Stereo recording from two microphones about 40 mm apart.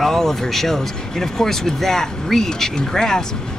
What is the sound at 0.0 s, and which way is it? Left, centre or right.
Speech, centre.